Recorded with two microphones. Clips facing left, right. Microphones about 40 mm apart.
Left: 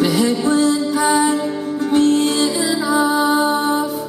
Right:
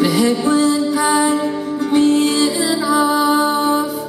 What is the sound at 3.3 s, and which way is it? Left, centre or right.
Music, centre.